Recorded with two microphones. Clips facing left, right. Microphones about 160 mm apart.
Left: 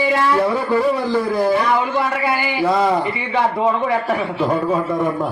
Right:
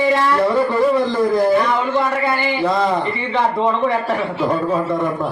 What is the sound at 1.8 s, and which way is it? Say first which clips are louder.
A man's voice: right 2 dB; 5° left (ahead or behind).